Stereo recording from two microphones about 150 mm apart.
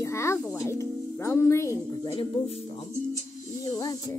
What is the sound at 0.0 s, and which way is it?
Music, 20° left (ahead or behind).